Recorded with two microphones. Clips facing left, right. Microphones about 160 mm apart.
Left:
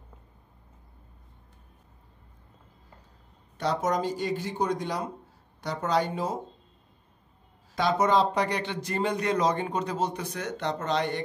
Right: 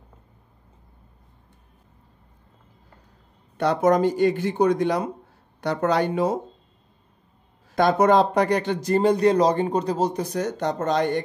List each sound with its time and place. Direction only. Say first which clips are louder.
3.5 s speech: right 8 dB; 60° right (ahead or behind)
7.7 s speech: right 6 dB; 55° right (ahead or behind)